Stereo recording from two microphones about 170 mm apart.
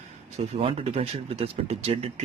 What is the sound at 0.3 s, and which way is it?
Speech, 40° right (ahead or behind).